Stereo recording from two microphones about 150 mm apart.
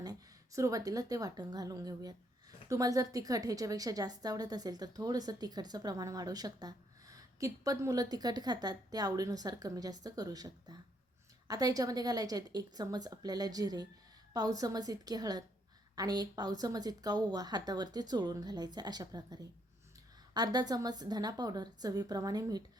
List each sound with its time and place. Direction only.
0.0 s a woman's voice: 25° right (ahead or behind)